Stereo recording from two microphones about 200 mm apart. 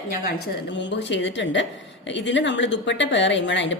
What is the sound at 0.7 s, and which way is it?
A woman's voice, 65° left (ahead or behind).